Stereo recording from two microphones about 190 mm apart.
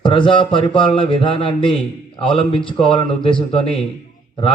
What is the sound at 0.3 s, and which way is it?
A man's voice, 25° left (ahead or behind).